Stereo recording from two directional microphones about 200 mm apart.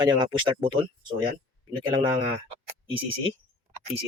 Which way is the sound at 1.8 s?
25° right (ahead or behind).